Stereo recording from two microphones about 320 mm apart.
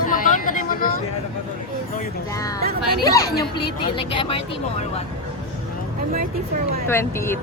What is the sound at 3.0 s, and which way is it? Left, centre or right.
Speech, centre.